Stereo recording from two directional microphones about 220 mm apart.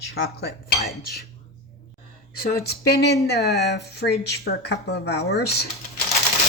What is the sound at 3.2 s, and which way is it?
Speech, 50° left (ahead or behind).